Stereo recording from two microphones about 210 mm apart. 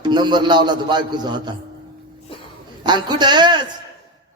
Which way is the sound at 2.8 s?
20° right (ahead or behind).